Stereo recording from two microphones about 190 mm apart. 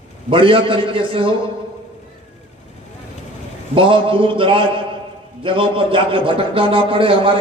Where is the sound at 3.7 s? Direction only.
30° right (ahead or behind).